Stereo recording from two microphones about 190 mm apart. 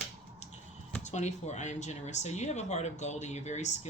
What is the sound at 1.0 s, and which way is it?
Speech, 35° left (ahead or behind).